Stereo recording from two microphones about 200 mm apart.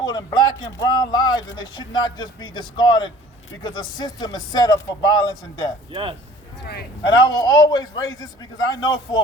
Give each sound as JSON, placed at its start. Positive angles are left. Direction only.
{"t": 0.0, "sound": "speech", "side_deg": 20}
{"t": 5.9, "sound": "speech", "side_deg": -25}
{"t": 7.0, "sound": "speech", "side_deg": 20}